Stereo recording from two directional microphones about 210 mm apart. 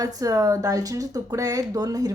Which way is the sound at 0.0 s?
15° right (ahead or behind).